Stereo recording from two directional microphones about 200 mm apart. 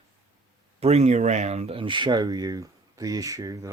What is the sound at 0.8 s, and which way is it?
Speech, 35° right (ahead or behind).